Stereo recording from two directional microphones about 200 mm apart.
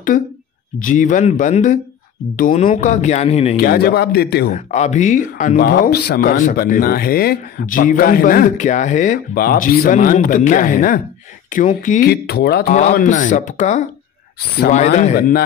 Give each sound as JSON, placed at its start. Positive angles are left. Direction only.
{"t": 0.8, "sound": "speech", "side_deg": 40}
{"t": 3.5, "sound": "speech", "side_deg": 50}
{"t": 4.5, "sound": "speech", "side_deg": 35}
{"t": 12.7, "sound": "speech", "side_deg": 40}
{"t": 15.1, "sound": "speech", "side_deg": 50}